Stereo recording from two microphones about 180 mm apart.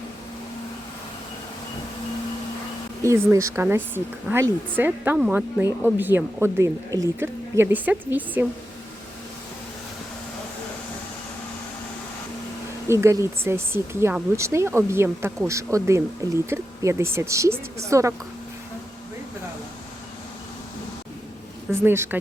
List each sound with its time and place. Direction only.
3.0 s speech: 15° right (ahead or behind)
12.9 s speech: 15° right (ahead or behind)
21.7 s speech: 15° right (ahead or behind)